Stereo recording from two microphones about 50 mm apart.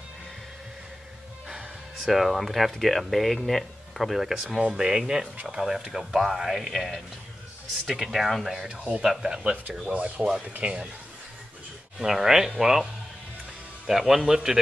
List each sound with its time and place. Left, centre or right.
2.0 s speech: centre
4.6 s speech: centre
8.5 s speech: centre
9.9 s speech: right
12.0 s speech: centre
13.8 s speech: centre